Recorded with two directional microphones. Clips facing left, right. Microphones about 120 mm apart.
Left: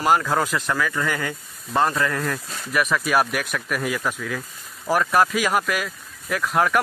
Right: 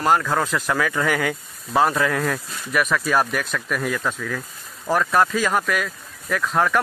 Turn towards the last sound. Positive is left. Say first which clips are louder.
# even
turn(degrees=5)  # may be behind; listen again after turning